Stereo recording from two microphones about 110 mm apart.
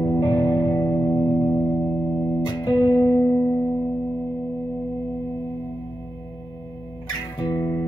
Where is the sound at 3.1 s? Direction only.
20° left (ahead or behind).